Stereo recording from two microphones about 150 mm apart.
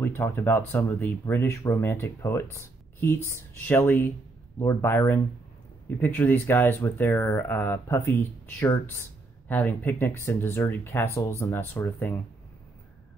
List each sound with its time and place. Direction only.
0.0 s speech: 15° left (ahead or behind)